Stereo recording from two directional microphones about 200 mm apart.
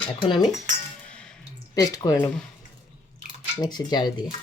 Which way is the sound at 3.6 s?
20° left (ahead or behind).